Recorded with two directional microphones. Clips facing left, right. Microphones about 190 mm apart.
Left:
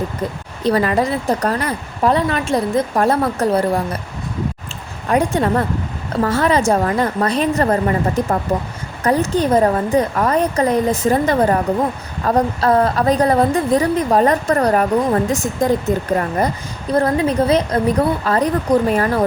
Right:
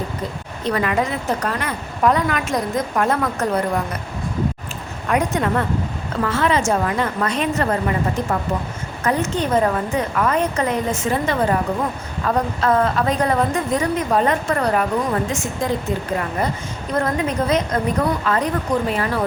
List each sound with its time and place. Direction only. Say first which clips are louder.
0.6 s a woman's voice: left 4 dB; 35° left (ahead or behind)
5.0 s a woman's voice: left 3 dB; 30° left (ahead or behind)
16.9 s a woman's voice: left 5 dB; 35° left (ahead or behind)